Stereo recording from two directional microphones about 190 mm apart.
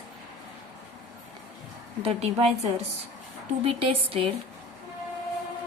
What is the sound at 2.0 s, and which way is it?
Speech, 35° right (ahead or behind).